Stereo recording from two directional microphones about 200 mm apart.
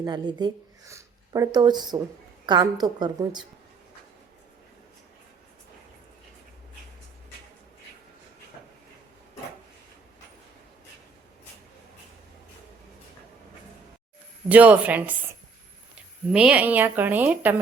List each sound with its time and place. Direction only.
0.0 s a woman's voice: 20° right (ahead or behind)
14.5 s a woman's voice: 5° right (ahead or behind)
16.3 s a woman's voice: 5° right (ahead or behind)